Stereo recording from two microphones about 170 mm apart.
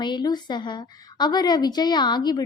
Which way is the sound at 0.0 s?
25° left (ahead or behind).